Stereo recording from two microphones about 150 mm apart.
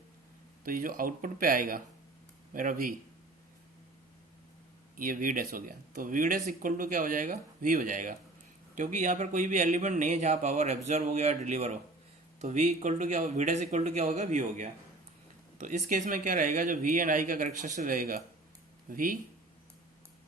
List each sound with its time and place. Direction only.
0.6 s speech: 70° right (ahead or behind)
4.9 s speech: 65° right (ahead or behind)